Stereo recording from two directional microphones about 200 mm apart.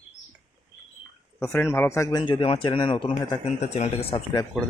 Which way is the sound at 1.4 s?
10° left (ahead or behind).